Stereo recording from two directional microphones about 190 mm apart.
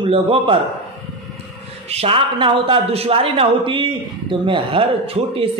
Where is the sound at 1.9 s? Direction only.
30° right (ahead or behind).